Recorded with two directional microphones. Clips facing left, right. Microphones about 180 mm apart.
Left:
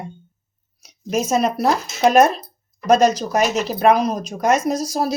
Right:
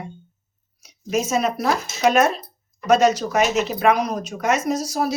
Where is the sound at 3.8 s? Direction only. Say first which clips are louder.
Left 6 dB; 35° left (ahead or behind).